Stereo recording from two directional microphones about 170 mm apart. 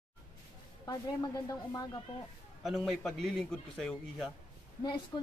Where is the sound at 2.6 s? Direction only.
Centre (ahead or behind).